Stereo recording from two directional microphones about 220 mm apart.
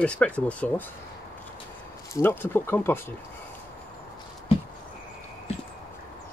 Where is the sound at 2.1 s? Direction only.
10° left (ahead or behind).